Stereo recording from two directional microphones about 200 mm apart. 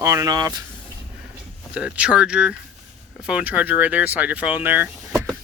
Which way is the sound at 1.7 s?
5° right (ahead or behind).